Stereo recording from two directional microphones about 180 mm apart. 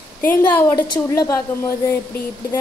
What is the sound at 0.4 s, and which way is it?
A woman's voice, 15° left (ahead or behind).